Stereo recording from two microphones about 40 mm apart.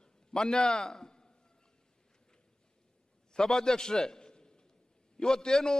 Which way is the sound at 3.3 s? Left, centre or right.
Centre.